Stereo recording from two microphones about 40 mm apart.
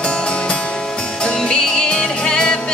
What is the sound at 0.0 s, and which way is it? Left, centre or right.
Music, left.